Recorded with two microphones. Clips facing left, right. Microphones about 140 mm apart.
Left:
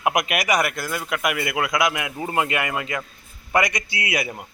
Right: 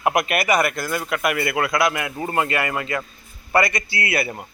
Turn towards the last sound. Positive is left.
turn(degrees=15)  # may be behind; listen again after turning